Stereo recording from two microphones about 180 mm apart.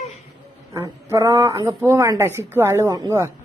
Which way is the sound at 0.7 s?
20° right (ahead or behind).